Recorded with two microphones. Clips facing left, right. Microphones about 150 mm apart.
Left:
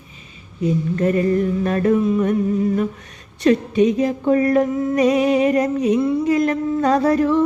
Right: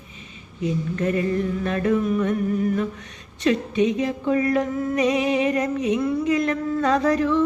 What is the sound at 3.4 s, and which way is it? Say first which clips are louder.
Music: left 5 dB; 40° left (ahead or behind).